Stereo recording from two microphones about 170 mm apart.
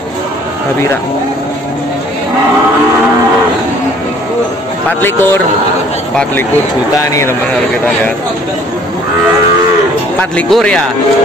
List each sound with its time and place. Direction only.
4.8 s speech: 10° left (ahead or behind)
7.0 s speech: 15° left (ahead or behind)
10.3 s speech: 5° left (ahead or behind)